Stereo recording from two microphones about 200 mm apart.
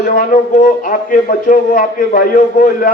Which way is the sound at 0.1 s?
45° left (ahead or behind).